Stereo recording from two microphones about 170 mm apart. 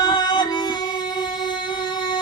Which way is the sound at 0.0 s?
25° left (ahead or behind).